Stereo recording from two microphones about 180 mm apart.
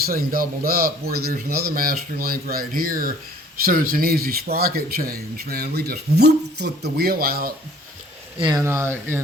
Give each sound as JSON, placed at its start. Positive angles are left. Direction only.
{"t": 0.0, "sound": "a man's voice", "side_deg": -55}
{"t": 8.4, "sound": "speech", "side_deg": -20}